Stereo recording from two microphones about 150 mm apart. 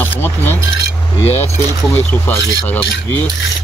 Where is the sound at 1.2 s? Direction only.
45° left (ahead or behind).